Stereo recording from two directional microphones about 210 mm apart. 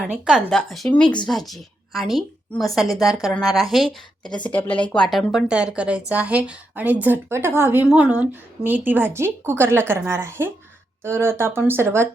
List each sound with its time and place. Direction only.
0.1 s a woman's voice: centre (ahead or behind)